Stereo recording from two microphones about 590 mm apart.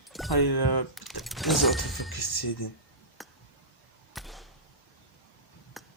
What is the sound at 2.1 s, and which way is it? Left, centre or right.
Speech, left.